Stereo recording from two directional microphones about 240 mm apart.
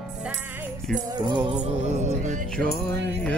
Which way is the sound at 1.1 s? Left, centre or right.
Centre.